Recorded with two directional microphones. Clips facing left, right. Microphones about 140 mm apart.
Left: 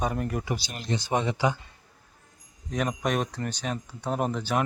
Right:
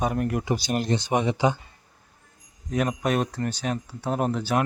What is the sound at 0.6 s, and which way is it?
Speech, 50° right (ahead or behind).